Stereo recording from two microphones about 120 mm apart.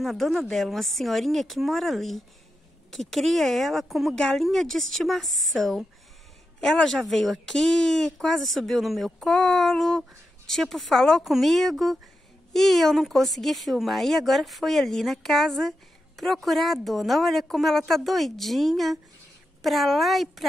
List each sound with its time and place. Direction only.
0.0 s speech: centre (ahead or behind)